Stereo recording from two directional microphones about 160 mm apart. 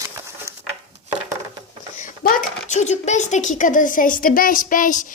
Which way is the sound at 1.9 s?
55° left (ahead or behind).